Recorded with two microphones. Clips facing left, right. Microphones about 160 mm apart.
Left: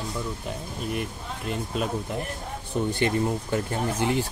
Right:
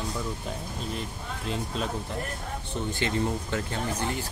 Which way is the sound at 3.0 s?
15° left (ahead or behind).